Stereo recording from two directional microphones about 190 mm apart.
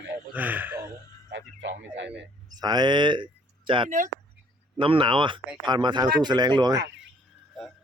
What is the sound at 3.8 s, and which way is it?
Speech, 40° right (ahead or behind).